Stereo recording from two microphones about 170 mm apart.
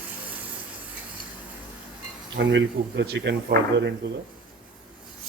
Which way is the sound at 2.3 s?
90° right.